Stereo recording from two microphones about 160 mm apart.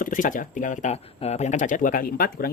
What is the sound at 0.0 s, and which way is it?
Speech, 55° left (ahead or behind).